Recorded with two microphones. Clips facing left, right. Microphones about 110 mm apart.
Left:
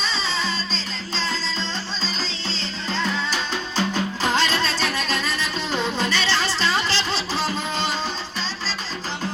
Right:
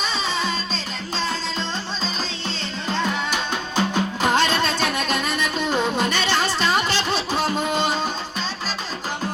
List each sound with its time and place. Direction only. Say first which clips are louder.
0.7 s music: right 2 dB; 55° right (ahead or behind)
3.8 s music: right 2 dB; 15° right (ahead or behind)
6.1 s music: right 2 dB; 50° right (ahead or behind)
6.8 s a sound: right 2 dB; 50° right (ahead or behind)